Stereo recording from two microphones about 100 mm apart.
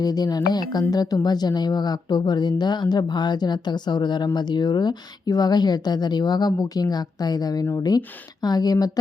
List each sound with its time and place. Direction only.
0.0 s speech: 40° left (ahead or behind)